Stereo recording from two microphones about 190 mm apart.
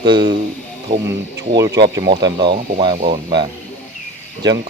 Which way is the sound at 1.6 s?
20° right (ahead or behind).